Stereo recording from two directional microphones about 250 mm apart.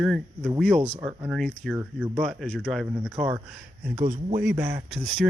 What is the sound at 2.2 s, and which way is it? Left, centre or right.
Speech, centre.